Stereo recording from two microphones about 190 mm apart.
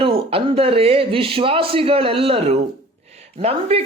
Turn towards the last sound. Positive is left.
turn(degrees=-30)  # may be behind; listen again after turning